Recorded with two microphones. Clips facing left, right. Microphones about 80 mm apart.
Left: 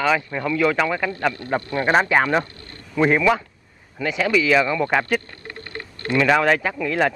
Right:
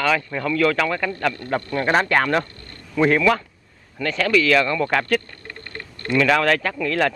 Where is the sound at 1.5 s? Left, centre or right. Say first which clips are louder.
Left 1 dB; centre.